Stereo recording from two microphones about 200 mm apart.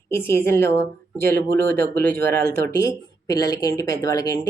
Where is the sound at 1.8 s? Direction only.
50° right (ahead or behind).